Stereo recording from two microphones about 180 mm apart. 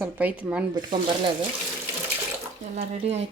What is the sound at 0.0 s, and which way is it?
Speech, 10° right (ahead or behind).